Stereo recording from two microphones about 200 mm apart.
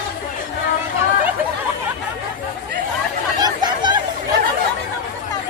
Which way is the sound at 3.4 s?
20° right (ahead or behind).